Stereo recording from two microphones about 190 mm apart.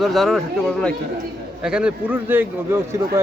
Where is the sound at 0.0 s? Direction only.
Centre (ahead or behind).